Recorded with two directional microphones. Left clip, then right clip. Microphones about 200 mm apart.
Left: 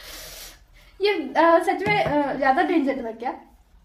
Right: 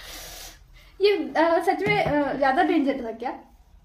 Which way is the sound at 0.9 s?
15° right (ahead or behind).